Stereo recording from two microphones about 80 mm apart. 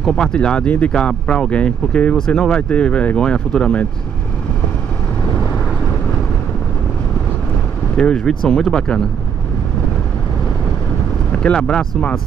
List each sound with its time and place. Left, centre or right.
0.0 s speech: centre
8.0 s speech: centre
11.3 s speech: centre